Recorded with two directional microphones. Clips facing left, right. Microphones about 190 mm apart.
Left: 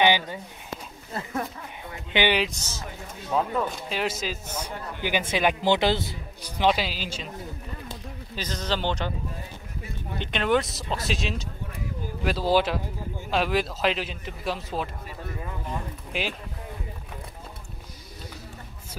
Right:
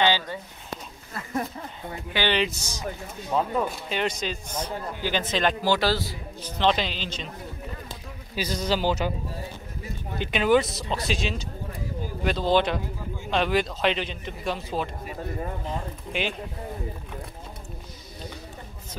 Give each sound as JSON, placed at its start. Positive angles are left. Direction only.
{"t": 0.0, "sound": "a sound", "side_deg": 15}
{"t": 2.1, "sound": "speech", "side_deg": 10}
{"t": 2.4, "sound": "speech", "side_deg": -10}
{"t": 4.0, "sound": "speech", "side_deg": 5}
{"t": 6.6, "sound": "speech", "side_deg": 5}
{"t": 8.4, "sound": "speech", "side_deg": -10}
{"t": 10.1, "sound": "a man's voice", "side_deg": -5}
{"t": 16.1, "sound": "a man's voice", "side_deg": 5}